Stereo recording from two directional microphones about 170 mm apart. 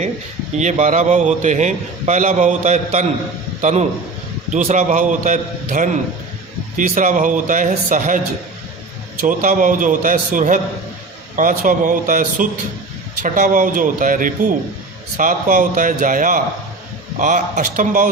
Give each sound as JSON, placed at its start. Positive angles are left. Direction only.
{"t": 0.6, "sound": "a man's voice", "side_deg": -45}
{"t": 9.2, "sound": "a man's voice", "side_deg": -50}